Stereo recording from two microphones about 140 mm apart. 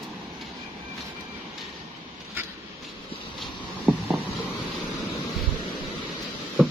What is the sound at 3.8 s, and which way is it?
Hum, 15° right (ahead or behind).